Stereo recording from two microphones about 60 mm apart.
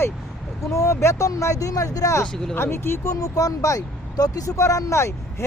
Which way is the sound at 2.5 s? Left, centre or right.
Left.